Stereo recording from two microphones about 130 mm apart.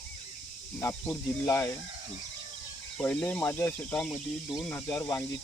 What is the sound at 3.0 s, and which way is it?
Speech, 15° left (ahead or behind).